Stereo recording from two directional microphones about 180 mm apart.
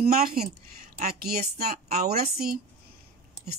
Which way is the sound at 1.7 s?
55° right (ahead or behind).